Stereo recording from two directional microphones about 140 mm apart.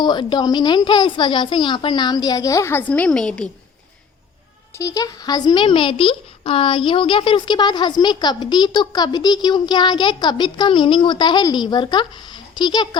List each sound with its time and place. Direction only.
0.0 s speech: 30° left (ahead or behind); by 3.5 s 5° left (ahead or behind)
4.7 s speech: 20° left (ahead or behind)